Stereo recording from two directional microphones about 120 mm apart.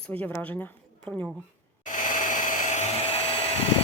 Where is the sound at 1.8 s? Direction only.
90° left; by 3.2 s 65° left (ahead or behind).